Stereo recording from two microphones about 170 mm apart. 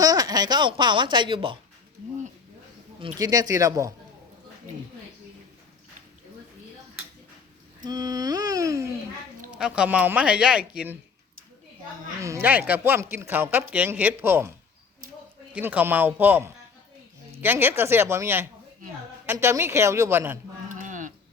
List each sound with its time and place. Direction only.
0.0 s speech: 20° right (ahead or behind)
3.2 s speech: 20° right (ahead or behind)
7.9 s a sound: 20° right (ahead or behind)
9.6 s speech: 5° right (ahead or behind)
12.2 s speech: 15° right (ahead or behind)
15.5 s speech: 10° right (ahead or behind)
20.7 s a sound: 50° right (ahead or behind)